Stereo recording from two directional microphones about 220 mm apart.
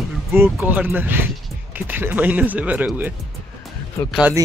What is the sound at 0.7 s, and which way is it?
Speech, 10° right (ahead or behind).